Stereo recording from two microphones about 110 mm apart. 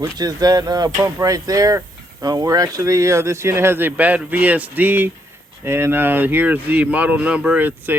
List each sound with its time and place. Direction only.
0.0 s speech: 35° right (ahead or behind); by 7.9 s 15° right (ahead or behind)